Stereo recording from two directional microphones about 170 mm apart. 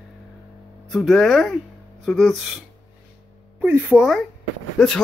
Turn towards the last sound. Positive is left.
turn(degrees=5)  # may be behind; listen again after turning